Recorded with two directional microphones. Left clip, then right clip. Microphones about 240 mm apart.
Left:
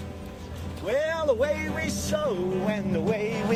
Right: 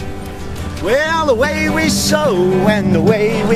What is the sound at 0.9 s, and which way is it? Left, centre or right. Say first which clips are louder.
Music: right 11 dB; right.